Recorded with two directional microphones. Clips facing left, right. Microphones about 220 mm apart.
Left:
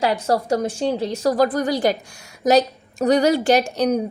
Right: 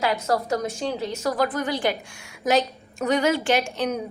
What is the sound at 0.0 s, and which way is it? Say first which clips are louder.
A woman's voice: left 3 dB; 30° left (ahead or behind).